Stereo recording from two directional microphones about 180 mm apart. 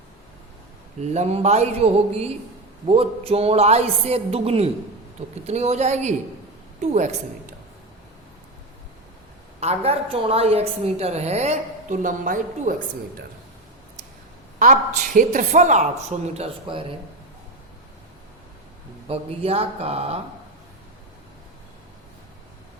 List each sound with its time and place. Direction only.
1.1 s a woman's voice: 35° right (ahead or behind)
9.6 s a woman's voice: 35° right (ahead or behind)
14.6 s speech: 45° right (ahead or behind)
19.0 s a woman's voice: 35° right (ahead or behind)